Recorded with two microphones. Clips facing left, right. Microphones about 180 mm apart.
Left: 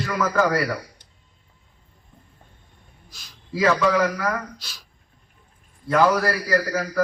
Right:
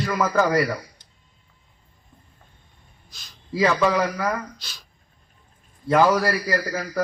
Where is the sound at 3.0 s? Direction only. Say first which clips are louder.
Left 1 dB; 10° left (ahead or behind).